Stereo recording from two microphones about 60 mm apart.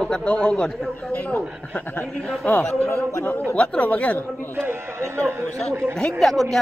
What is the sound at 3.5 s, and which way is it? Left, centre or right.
Speech, left.